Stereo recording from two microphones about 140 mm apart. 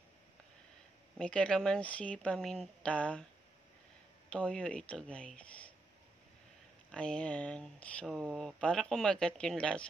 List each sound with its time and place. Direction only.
1.1 s speech: 5° left (ahead or behind)
4.3 s speech: 5° left (ahead or behind)
6.9 s speech: 5° left (ahead or behind)
8.1 s speech: 5° right (ahead or behind)